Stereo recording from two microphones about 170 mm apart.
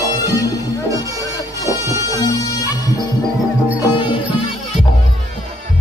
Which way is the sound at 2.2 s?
20° left (ahead or behind).